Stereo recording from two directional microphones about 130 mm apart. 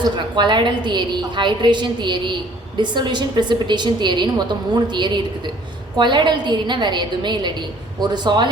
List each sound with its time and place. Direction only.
0.0 s a woman's voice: 35° right (ahead or behind)